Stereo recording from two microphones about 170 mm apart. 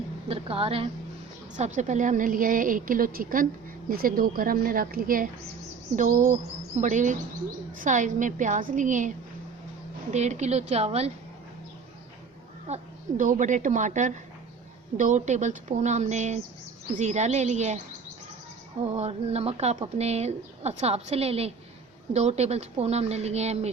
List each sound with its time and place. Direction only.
0.3 s a sound: 35° right (ahead or behind)
1.5 s a woman's voice: 45° right (ahead or behind)
6.0 s a woman's voice: 45° right (ahead or behind)
12.6 s a woman's voice: 45° right (ahead or behind)
18.9 s speech: 40° right (ahead or behind)